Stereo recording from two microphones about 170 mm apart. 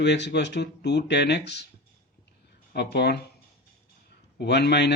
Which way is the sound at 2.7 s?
75° left (ahead or behind).